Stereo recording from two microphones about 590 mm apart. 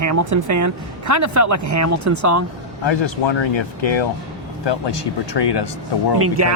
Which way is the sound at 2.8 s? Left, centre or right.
Left.